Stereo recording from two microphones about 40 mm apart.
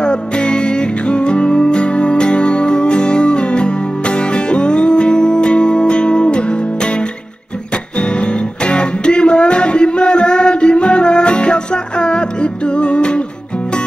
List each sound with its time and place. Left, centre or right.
0.0 s music: left
8.0 s music: left